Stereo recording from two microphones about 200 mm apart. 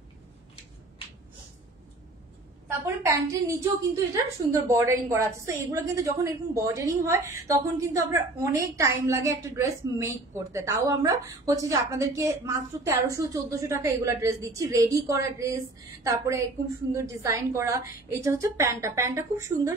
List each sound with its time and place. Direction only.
2.8 s a woman's voice: 15° right (ahead or behind)